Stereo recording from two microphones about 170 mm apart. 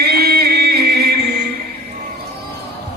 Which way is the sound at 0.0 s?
65° right (ahead or behind).